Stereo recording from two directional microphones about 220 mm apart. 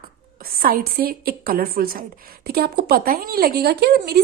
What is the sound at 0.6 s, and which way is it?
A woman's voice, 40° right (ahead or behind).